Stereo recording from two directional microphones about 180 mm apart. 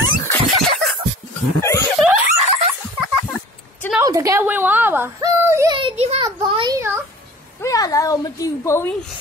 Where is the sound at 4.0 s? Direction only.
20° right (ahead or behind).